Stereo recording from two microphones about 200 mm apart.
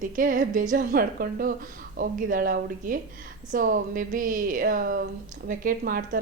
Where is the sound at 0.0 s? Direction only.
40° right (ahead or behind).